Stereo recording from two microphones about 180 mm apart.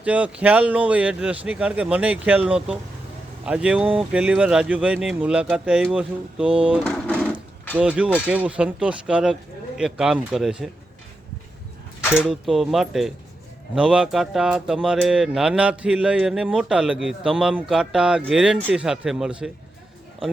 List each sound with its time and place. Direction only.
0.0 s speech: 5° right (ahead or behind)
12.3 s speech: centre (ahead or behind)